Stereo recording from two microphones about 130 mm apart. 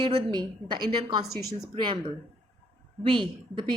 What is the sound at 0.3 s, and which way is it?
A woman's voice, 35° right (ahead or behind).